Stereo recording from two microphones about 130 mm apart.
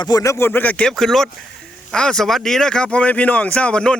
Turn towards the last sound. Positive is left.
turn(degrees=10)  # may be behind; listen again after turning